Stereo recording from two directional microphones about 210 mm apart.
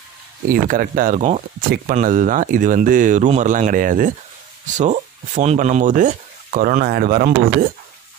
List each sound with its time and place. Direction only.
0.5 s speech: 40° right (ahead or behind)